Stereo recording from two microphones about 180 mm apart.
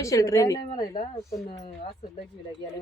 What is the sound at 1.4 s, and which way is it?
Speech, 35° left (ahead or behind).